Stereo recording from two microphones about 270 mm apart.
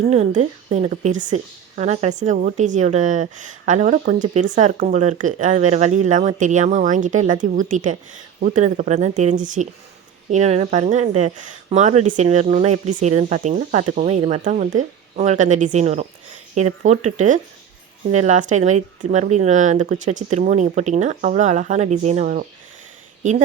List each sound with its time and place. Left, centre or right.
0.1 s a woman's voice: right